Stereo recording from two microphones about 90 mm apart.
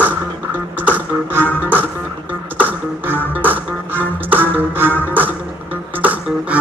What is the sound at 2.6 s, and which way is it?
Music, 20° right (ahead or behind).